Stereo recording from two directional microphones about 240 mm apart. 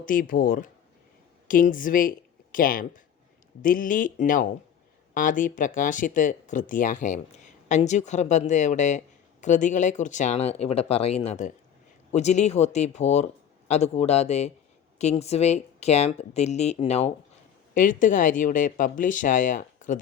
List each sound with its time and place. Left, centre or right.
0.0 s speech: left